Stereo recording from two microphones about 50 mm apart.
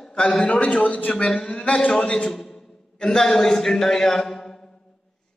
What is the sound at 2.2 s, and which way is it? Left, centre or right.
A man's voice, centre.